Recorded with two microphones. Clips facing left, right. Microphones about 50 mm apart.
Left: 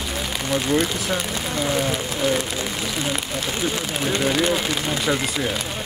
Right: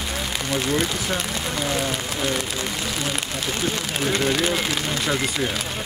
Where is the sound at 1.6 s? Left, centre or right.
Centre.